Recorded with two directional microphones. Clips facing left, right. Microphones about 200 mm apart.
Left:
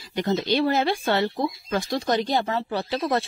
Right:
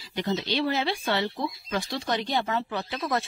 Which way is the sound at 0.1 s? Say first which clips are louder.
Left 5 dB; 45° left (ahead or behind).